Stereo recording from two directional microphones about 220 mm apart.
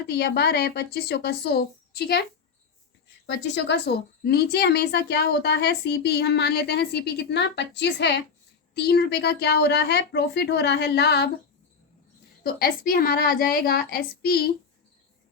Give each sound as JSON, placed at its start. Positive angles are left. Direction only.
{"t": 0.1, "sound": "a woman's voice", "side_deg": 50}
{"t": 3.2, "sound": "a woman's voice", "side_deg": 50}
{"t": 12.4, "sound": "a woman's voice", "side_deg": 45}